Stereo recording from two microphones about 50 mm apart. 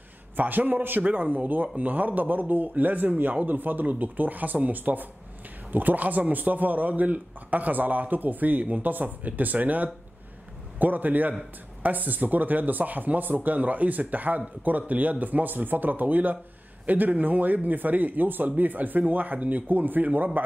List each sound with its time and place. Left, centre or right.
0.4 s speech: right